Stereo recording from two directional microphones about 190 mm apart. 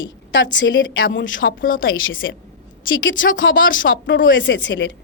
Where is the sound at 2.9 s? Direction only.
80° left.